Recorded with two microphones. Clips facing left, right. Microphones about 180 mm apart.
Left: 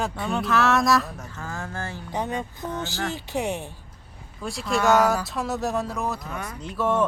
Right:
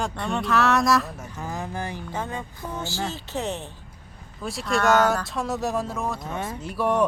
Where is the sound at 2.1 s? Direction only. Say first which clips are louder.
Left 3 dB; 20° left (ahead or behind).